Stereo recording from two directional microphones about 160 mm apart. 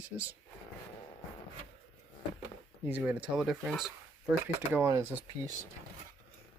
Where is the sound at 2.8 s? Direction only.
10° right (ahead or behind).